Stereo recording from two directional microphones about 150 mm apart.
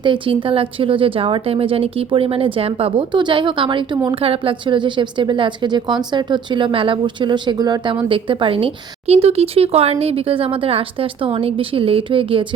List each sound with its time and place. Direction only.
0.0 s speech: 35° right (ahead or behind)